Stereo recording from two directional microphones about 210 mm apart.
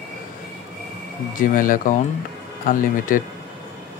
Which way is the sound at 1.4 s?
40° left (ahead or behind).